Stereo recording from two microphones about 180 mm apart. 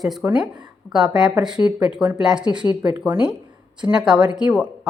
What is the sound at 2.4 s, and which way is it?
Speech, 25° right (ahead or behind).